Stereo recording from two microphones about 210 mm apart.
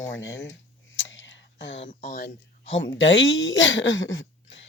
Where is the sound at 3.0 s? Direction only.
60° left (ahead or behind).